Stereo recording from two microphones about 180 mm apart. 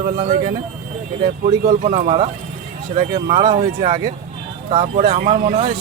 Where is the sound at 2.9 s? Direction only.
25° right (ahead or behind).